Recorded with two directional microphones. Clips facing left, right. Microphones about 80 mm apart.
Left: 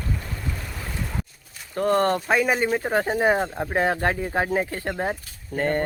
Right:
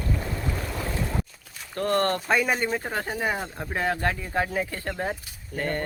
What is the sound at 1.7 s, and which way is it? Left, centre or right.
Speech, centre.